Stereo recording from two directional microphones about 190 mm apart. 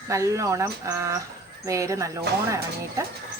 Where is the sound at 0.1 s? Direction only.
15° right (ahead or behind).